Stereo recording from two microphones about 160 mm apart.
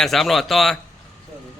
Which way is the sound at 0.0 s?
Centre (ahead or behind).